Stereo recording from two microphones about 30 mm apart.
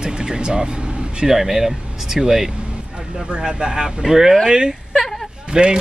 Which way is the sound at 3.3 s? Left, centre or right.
Right.